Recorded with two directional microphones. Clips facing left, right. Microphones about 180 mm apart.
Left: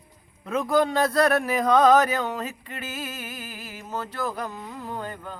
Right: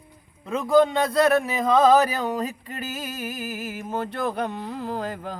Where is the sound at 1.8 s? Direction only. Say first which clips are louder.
Right 2 dB; 30° right (ahead or behind).